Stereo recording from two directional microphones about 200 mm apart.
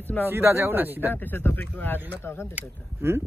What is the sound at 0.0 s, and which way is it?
Speech, 10° left (ahead or behind).